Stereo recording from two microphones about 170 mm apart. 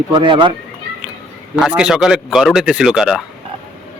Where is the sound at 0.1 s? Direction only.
30° right (ahead or behind).